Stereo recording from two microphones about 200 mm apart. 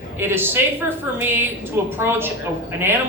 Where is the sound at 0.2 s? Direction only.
10° right (ahead or behind).